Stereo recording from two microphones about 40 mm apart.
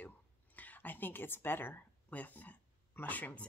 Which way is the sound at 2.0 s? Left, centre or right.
Left.